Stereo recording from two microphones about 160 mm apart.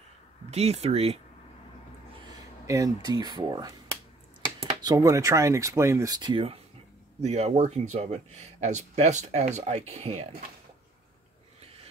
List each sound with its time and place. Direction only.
0.5 s speech: 40° right (ahead or behind)
2.6 s speech: 20° right (ahead or behind)
4.8 s speech: 20° right (ahead or behind); by 10.2 s 45° right (ahead or behind)